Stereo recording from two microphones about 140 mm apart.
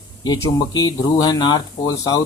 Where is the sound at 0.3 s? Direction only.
25° left (ahead or behind).